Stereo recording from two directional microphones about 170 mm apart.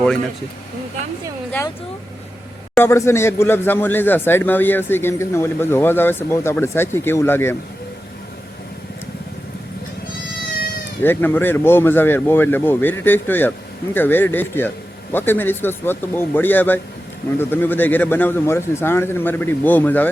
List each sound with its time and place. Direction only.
2.7 s speech: 15° left (ahead or behind)
11.0 s speech: 10° left (ahead or behind)